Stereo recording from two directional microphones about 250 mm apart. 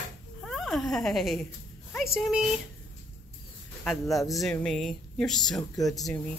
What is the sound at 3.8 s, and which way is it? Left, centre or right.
Speech, centre.